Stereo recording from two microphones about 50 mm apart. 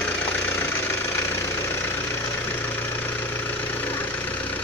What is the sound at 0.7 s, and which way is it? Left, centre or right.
Engine knocking, left.